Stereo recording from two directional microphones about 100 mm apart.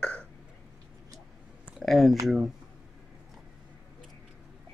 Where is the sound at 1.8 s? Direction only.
Centre (ahead or behind).